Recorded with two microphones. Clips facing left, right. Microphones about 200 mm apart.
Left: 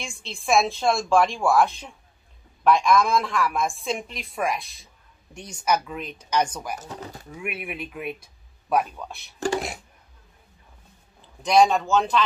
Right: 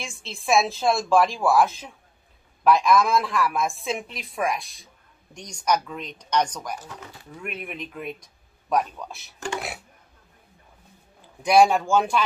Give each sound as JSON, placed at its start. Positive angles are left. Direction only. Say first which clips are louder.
{"t": 0.0, "sound": "a woman's voice", "louder": "even", "side_deg": 0}
{"t": 6.9, "sound": "speech", "louder": "left 5 dB", "side_deg": 35}
{"t": 7.3, "sound": "speech", "louder": "left 1 dB", "side_deg": 10}
{"t": 11.4, "sound": "speech", "louder": "right 1 dB", "side_deg": -10}